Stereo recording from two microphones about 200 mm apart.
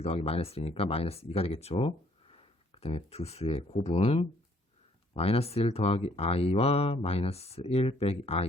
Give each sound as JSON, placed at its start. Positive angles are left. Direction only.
{"t": 0.0, "sound": "speech", "side_deg": 30}